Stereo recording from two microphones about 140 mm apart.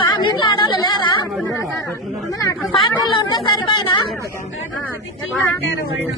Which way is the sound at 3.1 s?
35° left (ahead or behind).